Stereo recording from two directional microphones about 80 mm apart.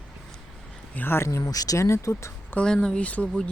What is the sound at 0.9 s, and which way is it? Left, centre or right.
Speech, left.